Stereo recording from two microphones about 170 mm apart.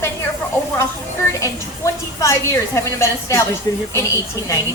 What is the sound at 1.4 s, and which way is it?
A woman's voice, 15° left (ahead or behind).